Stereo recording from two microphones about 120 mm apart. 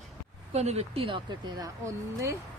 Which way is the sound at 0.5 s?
65° right (ahead or behind).